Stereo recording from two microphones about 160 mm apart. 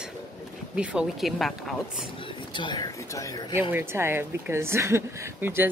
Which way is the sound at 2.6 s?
30° left (ahead or behind).